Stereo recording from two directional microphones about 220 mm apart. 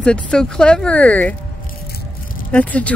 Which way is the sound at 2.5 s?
5° left (ahead or behind).